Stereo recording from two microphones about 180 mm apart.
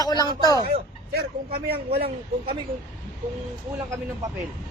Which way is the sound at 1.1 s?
60° right (ahead or behind).